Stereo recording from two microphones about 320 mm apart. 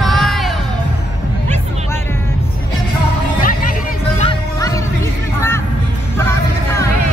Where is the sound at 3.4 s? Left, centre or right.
Left.